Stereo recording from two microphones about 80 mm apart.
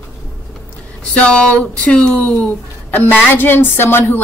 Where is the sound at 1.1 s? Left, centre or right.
Centre.